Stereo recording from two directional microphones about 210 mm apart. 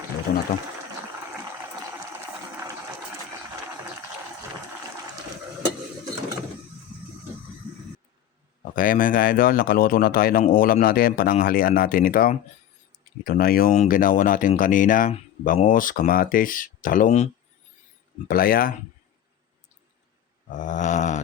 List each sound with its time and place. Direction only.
0.3 s speech: 50° left (ahead or behind)
8.7 s speech: 40° left (ahead or behind)
18.3 s speech: 45° left (ahead or behind)
20.5 s a sound: 35° left (ahead or behind)